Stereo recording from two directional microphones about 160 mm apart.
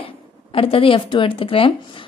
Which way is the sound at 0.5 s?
35° left (ahead or behind).